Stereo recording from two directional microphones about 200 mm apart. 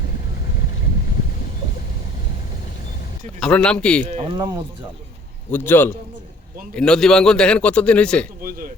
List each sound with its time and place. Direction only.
3.4 s a man's voice: 5° left (ahead or behind)
4.1 s speech: 25° right (ahead or behind)
5.5 s a man's voice: 10° left (ahead or behind)
8.4 s a man's voice: 45° right (ahead or behind)